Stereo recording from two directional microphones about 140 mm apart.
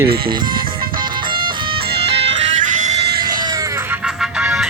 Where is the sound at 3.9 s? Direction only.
10° right (ahead or behind).